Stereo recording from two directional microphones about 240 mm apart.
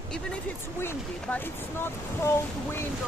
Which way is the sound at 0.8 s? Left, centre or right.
Centre.